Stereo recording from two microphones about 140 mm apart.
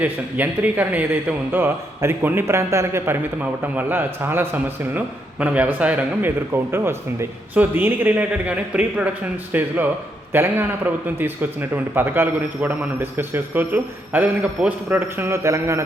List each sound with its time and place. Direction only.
0.0 s a man's voice: 10° right (ahead or behind)